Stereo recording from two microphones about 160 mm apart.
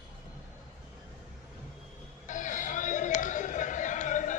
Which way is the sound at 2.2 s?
50° left (ahead or behind).